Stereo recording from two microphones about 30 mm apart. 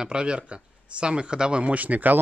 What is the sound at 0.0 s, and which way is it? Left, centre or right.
Speech, right.